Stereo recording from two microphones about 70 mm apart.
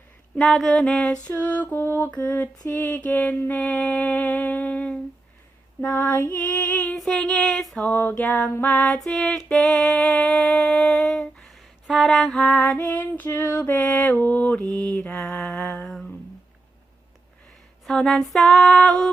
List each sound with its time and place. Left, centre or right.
0.4 s music: centre
1.3 s female singing: left
6.9 s female singing: centre
7.9 s female singing: left
9.0 s music: centre
9.9 s humming: centre
11.5 s a sound: centre
12.7 s female singing: left
15.2 s music: centre
15.9 s humming: centre
17.8 s female singing: centre